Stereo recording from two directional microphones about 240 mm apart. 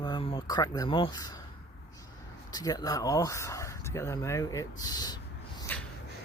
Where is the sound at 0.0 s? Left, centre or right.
Left.